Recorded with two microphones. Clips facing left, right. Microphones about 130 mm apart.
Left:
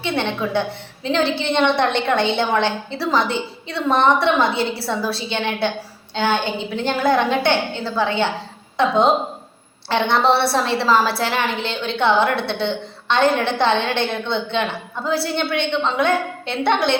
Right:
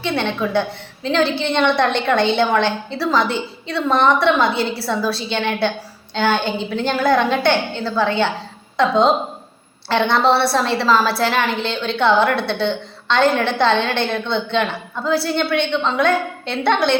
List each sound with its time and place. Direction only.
0.0 s a woman's voice: 20° left (ahead or behind)